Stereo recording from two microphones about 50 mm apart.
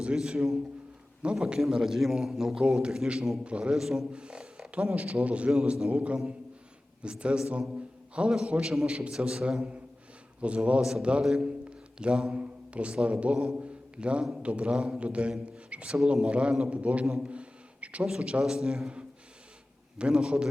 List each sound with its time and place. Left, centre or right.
0.0 s a man's voice: centre
3.4 s a man's voice: right
3.8 s a man's voice: centre
4.1 s a sound: centre
4.7 s a man's voice: right
17.2 s a sound: right
18.0 s a man's voice: centre
20.0 s a man's voice: centre